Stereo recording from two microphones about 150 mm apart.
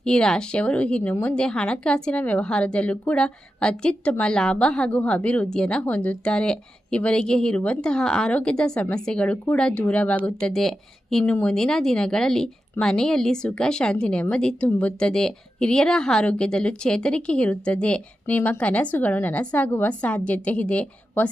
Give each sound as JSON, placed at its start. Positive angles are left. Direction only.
{"t": 0.0, "sound": "speech", "side_deg": 5}